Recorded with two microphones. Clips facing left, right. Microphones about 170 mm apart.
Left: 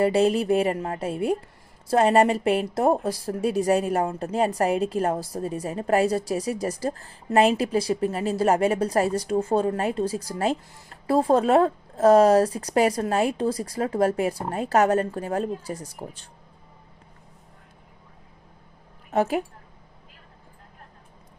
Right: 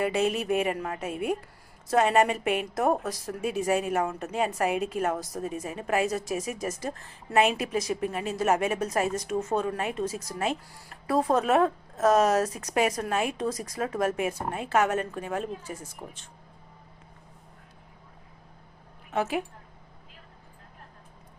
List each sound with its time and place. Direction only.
0.0 s speech: 35° left (ahead or behind)
19.1 s speech: 40° left (ahead or behind)